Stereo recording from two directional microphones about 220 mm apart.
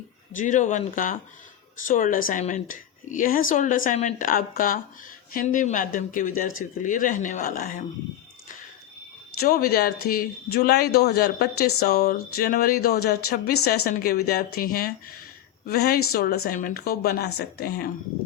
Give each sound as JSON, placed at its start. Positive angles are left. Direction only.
{"t": 0.3, "sound": "speech", "side_deg": 35}
{"t": 9.4, "sound": "speech", "side_deg": 45}